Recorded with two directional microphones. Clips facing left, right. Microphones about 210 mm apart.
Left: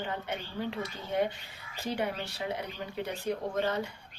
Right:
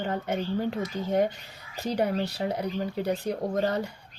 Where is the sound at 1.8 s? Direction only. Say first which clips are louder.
Right 6 dB; 40° right (ahead or behind).